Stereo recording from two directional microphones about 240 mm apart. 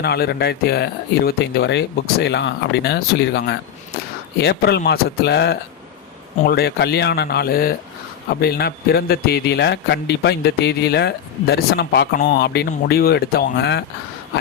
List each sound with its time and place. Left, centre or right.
0.0 s a man's voice: left